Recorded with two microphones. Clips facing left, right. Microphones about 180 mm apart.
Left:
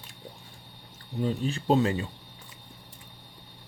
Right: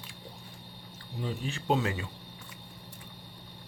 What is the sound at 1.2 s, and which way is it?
Speech, 40° left (ahead or behind).